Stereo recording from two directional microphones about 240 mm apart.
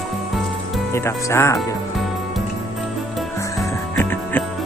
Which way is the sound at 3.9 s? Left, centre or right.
Centre.